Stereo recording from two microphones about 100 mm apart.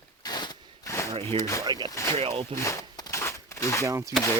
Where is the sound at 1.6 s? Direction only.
45° right (ahead or behind).